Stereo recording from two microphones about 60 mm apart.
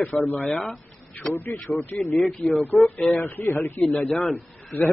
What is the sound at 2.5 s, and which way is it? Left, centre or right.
Speech, left.